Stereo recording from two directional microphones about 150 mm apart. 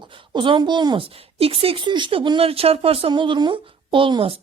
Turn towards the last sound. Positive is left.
turn(degrees=-35)  # may be behind; listen again after turning